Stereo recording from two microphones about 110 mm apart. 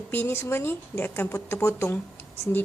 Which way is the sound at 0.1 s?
20° left (ahead or behind).